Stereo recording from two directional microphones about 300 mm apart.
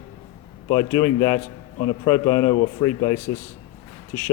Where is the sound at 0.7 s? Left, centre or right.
Centre.